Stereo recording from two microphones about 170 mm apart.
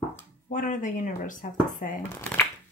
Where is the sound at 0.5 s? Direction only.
45° left (ahead or behind).